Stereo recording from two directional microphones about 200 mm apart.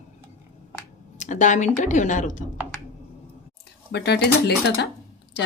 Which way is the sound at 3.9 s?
55° left (ahead or behind).